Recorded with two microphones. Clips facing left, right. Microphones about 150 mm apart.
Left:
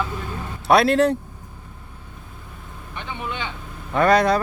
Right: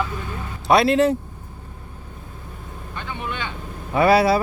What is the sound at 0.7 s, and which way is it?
Speech, centre (ahead or behind).